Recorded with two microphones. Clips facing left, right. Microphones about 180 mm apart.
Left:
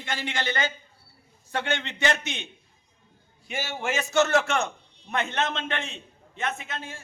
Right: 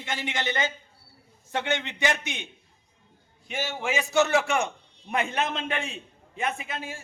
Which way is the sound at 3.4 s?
10° left (ahead or behind).